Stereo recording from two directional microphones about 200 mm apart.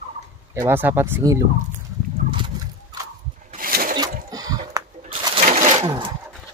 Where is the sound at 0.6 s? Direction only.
10° right (ahead or behind).